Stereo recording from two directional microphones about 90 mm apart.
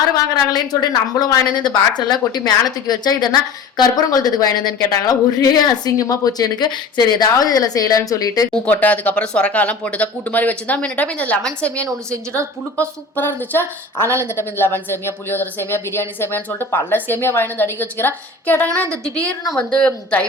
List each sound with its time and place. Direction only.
0.7 s speech: 40° left (ahead or behind)
1.2 s speech: 50° left (ahead or behind)
8.7 s speech: 20° left (ahead or behind)
11.9 s a woman's voice: 35° right (ahead or behind)
13.1 s speech: 25° left (ahead or behind)
14.0 s a woman's voice: 30° right (ahead or behind)
14.3 s speech: 25° left (ahead or behind)
18.9 s a woman's voice: 35° right (ahead or behind)
19.5 s speech: 10° left (ahead or behind)